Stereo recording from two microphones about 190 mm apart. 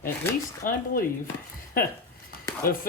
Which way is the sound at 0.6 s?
45° left (ahead or behind).